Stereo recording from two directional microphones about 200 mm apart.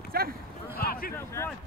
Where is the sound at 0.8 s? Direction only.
50° left (ahead or behind).